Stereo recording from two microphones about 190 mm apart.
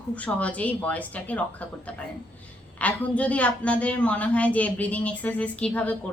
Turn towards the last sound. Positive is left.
turn(degrees=10)  # may be behind; listen again after turning